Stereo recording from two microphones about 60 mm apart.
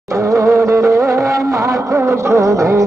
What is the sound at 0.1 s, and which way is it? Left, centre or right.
Music, right.